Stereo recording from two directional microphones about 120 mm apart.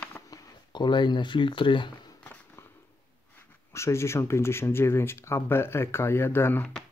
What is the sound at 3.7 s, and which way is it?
Speech, 25° left (ahead or behind).